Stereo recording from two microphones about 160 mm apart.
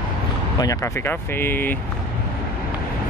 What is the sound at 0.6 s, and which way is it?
Speech, 20° left (ahead or behind).